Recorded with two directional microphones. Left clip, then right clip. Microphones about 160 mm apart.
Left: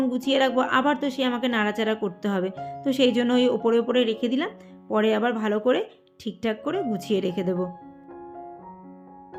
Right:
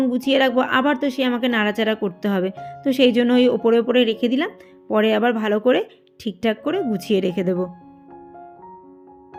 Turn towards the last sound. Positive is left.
turn(degrees=-25)  # may be behind; listen again after turning